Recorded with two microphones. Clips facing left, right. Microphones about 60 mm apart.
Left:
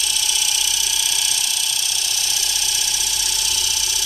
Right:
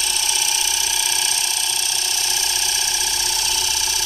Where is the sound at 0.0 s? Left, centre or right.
Right.